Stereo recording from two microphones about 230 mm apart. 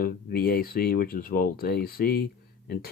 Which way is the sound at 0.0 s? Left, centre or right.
Left.